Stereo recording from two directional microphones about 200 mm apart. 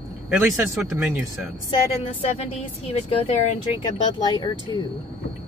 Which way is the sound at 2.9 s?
30° left (ahead or behind).